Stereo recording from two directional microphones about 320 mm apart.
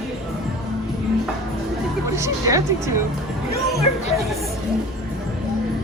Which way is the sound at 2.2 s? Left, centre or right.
Centre.